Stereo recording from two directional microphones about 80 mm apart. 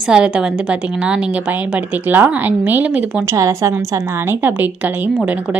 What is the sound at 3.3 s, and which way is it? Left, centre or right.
Speech, right.